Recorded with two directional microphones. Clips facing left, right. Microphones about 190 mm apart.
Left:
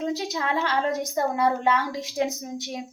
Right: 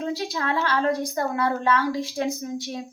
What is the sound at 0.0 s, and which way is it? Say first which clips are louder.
A woman's voice: even; 20° left (ahead or behind).